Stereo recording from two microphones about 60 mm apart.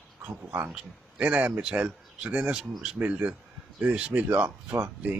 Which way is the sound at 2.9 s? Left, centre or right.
Right.